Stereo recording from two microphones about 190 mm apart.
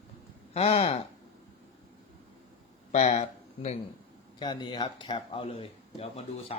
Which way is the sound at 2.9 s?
35° left (ahead or behind).